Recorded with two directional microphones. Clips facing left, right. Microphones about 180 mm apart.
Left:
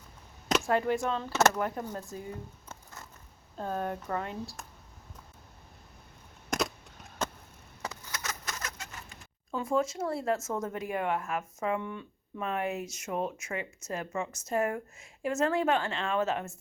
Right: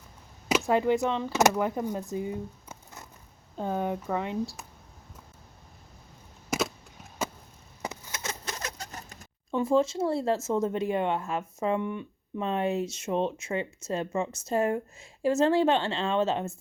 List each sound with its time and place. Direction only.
0.6 s speech: 20° right (ahead or behind)
2.6 s music: 15° right (ahead or behind)
3.6 s speech: 10° right (ahead or behind)
6.5 s a sound: centre (ahead or behind)
7.8 s chicken: 25° right (ahead or behind); by 9.2 s 40° right (ahead or behind)
9.5 s speech: 25° right (ahead or behind)
11.8 s speech: 15° right (ahead or behind)